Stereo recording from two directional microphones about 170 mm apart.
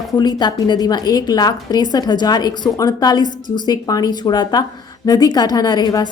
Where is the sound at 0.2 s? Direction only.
25° left (ahead or behind).